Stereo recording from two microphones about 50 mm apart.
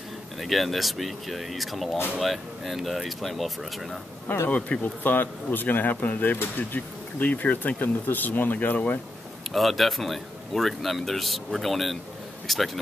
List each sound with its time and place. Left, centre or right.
0.4 s speech: centre
4.5 s speech: left
9.5 s speech: centre